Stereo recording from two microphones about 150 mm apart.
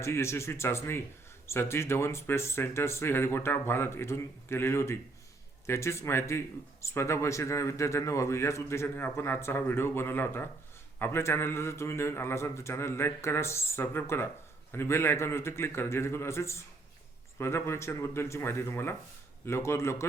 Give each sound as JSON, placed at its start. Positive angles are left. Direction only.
{"t": 0.0, "sound": "a man's voice", "side_deg": 15}